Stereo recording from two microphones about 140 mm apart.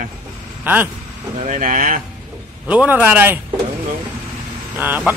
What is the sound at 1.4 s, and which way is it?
Speech, 70° right (ahead or behind).